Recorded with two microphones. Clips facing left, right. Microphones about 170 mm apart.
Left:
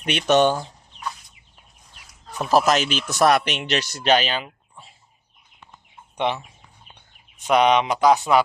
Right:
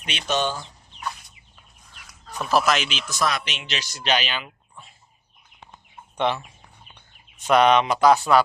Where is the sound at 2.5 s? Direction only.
40° left (ahead or behind).